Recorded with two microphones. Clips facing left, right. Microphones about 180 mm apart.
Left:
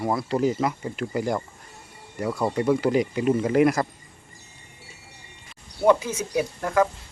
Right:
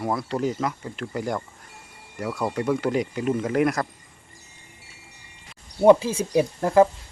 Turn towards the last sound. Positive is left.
turn(degrees=-30)  # may be behind; listen again after turning